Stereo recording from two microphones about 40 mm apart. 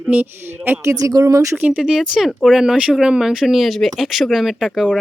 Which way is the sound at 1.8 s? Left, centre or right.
Centre.